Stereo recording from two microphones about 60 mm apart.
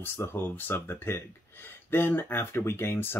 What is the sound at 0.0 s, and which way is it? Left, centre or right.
Speech, left.